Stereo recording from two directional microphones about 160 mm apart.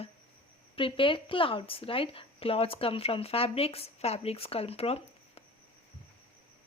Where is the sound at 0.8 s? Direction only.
35° left (ahead or behind).